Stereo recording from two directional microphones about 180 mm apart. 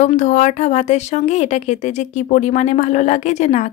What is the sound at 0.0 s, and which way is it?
Speech, 40° left (ahead or behind).